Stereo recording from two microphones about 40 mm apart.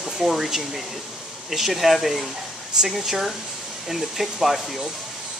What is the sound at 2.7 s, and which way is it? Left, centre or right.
Speech, centre.